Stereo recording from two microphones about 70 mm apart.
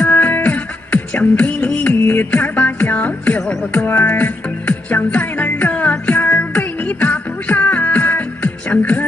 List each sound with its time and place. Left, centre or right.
0.0 s music: left